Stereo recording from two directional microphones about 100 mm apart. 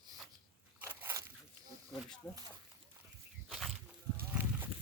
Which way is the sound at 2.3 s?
20° left (ahead or behind).